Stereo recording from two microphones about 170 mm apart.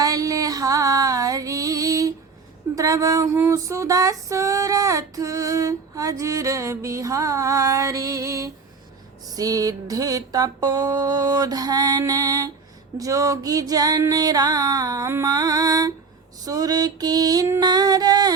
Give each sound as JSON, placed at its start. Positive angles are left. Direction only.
{"t": 0.0, "sound": "music", "side_deg": -20}
{"t": 2.7, "sound": "female singing", "side_deg": -20}
{"t": 16.4, "sound": "mantra", "side_deg": -20}